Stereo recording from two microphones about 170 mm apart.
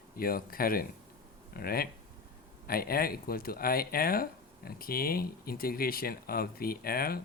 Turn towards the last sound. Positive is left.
turn(degrees=60)  # may be behind; listen again after turning